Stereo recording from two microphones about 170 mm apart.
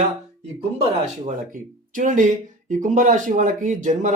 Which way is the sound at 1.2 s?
50° right (ahead or behind).